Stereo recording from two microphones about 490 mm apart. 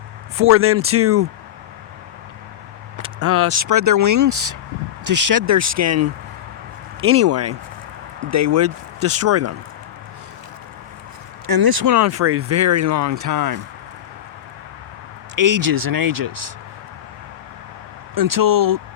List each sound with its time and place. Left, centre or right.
0.3 s speech: right
3.0 s speech: right
7.1 s speech: right
11.4 s speech: right
11.9 s speech: right
15.4 s speech: right
18.1 s speech: right